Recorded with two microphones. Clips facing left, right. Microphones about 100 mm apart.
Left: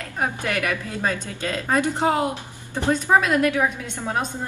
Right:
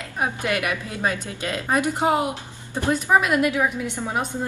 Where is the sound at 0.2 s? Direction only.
15° right (ahead or behind).